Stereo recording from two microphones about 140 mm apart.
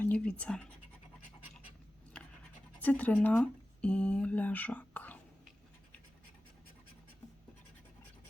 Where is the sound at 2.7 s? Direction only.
10° left (ahead or behind).